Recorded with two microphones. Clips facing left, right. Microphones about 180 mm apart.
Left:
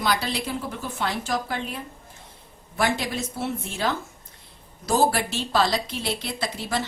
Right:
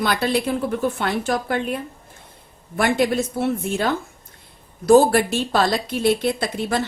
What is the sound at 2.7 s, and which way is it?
A woman's voice, 55° right (ahead or behind).